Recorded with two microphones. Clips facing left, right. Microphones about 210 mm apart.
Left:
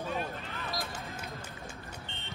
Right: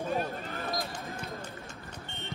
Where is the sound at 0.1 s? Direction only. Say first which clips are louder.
Right 4 dB; 45° right (ahead or behind).